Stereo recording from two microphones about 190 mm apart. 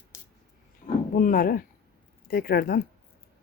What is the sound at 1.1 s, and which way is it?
Speech, 45° left (ahead or behind).